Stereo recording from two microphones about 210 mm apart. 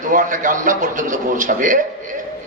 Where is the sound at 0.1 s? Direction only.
40° right (ahead or behind).